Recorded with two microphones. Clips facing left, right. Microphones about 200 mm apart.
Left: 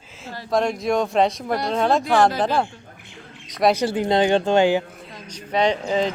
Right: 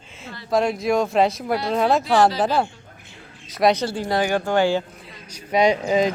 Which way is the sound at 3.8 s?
15° left (ahead or behind).